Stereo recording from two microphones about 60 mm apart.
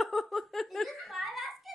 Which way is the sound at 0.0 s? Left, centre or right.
Centre.